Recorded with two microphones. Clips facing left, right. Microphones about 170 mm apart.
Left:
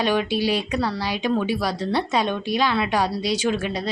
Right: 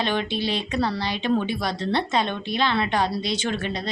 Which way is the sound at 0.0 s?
10° left (ahead or behind).